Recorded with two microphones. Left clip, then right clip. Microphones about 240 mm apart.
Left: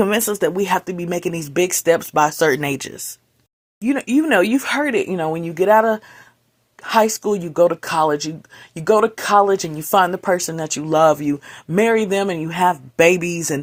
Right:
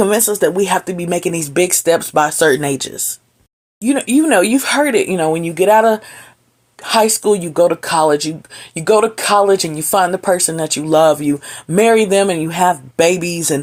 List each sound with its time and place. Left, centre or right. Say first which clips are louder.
0.0 s speech: right 4 dB; left